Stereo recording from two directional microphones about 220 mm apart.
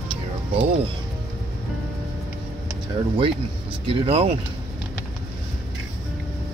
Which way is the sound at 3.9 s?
25° right (ahead or behind).